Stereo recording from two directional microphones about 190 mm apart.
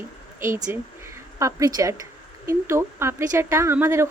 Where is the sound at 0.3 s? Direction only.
15° right (ahead or behind).